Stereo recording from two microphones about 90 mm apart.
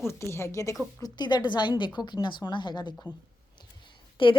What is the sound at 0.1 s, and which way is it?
Speech, 30° left (ahead or behind).